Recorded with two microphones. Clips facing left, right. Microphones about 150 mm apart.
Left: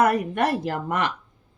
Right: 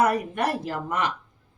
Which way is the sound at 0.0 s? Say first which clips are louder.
Left 2 dB; 60° left (ahead or behind).